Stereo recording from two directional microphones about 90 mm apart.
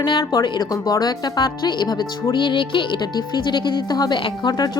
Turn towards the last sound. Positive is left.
turn(degrees=60)  # may be behind; listen again after turning